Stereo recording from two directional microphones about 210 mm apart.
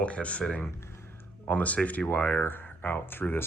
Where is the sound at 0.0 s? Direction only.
5° left (ahead or behind).